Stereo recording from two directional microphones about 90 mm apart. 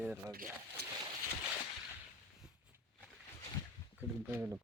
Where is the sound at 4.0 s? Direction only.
20° right (ahead or behind).